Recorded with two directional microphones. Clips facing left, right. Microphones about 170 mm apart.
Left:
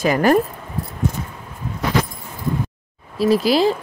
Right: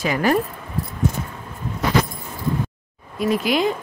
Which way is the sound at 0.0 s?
45° left (ahead or behind).